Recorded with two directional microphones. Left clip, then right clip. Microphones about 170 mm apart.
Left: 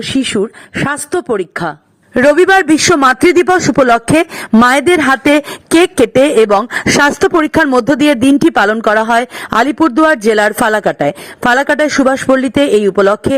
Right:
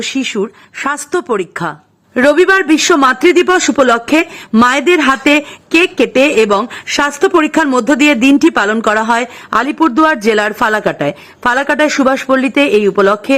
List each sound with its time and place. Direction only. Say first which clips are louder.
0.0 s speech: left 2 dB; 25° left (ahead or behind)
2.1 s speech: left 1 dB; 35° left (ahead or behind)